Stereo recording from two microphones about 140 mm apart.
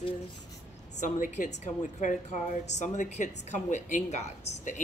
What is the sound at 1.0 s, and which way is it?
A woman's voice, 70° left (ahead or behind).